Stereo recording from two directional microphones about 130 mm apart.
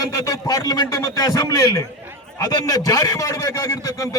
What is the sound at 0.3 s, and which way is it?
A man's voice, 30° left (ahead or behind).